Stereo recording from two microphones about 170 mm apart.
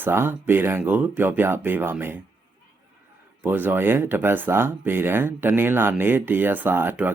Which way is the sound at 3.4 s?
10° right (ahead or behind).